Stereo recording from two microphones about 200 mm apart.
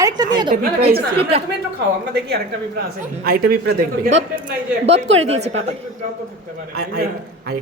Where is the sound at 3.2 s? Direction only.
50° right (ahead or behind).